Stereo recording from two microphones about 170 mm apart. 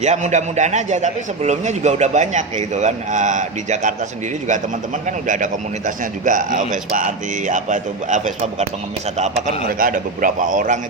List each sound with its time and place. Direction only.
0.0 s a man's voice: 45° right (ahead or behind)
5.0 s a man's voice: 50° right (ahead or behind)